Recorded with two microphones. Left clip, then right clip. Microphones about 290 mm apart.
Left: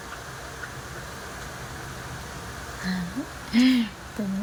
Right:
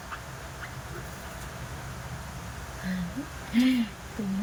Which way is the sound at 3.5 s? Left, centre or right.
Centre.